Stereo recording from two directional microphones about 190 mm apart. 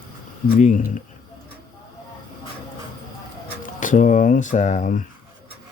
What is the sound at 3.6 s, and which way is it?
Speech, 40° left (ahead or behind).